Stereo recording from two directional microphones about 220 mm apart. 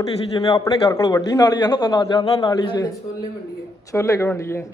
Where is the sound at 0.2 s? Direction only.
20° left (ahead or behind).